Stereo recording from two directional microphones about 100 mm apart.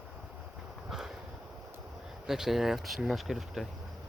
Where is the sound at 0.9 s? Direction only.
Centre (ahead or behind).